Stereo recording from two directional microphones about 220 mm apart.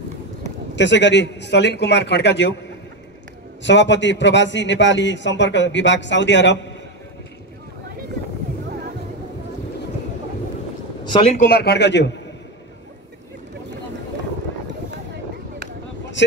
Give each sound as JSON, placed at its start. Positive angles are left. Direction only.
{"t": 0.7, "sound": "a man's voice", "side_deg": 55}
{"t": 3.6, "sound": "a man's voice", "side_deg": 55}
{"t": 11.1, "sound": "speech", "side_deg": 25}
{"t": 11.3, "sound": "a man's voice", "side_deg": 45}
{"t": 16.2, "sound": "speech", "side_deg": 55}